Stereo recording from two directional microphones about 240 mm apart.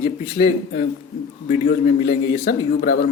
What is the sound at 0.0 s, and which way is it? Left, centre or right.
A man's voice, left.